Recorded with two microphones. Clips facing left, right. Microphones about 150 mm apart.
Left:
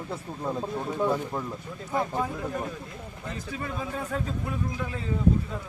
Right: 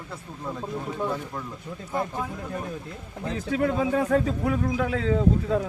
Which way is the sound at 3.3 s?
80° right.